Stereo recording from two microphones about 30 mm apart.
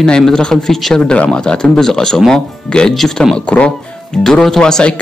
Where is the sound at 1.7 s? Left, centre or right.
Centre.